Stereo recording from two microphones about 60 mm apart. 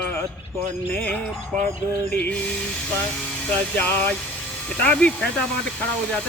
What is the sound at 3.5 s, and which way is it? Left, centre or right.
Speech, left.